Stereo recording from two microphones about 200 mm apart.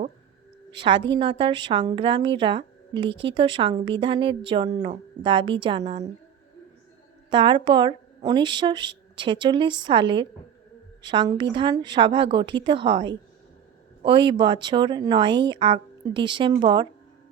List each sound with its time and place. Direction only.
0.7 s a woman's voice: 25° right (ahead or behind)
7.3 s a woman's voice: 20° right (ahead or behind)